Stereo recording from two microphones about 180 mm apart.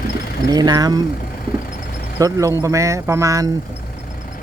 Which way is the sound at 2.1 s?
20° right (ahead or behind).